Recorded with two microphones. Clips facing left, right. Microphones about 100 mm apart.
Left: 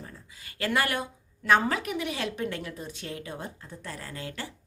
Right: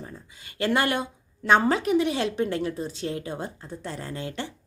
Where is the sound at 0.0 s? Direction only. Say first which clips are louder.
Right 4 dB; 25° right (ahead or behind).